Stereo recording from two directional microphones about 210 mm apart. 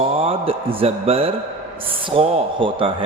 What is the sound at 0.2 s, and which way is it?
A man's voice, 25° right (ahead or behind).